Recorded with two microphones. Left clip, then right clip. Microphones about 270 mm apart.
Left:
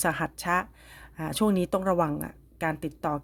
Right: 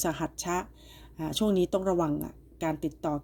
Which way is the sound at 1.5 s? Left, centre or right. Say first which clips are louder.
Right 1 dB; left.